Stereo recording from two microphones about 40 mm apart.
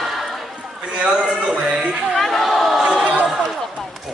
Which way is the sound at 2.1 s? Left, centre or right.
Centre.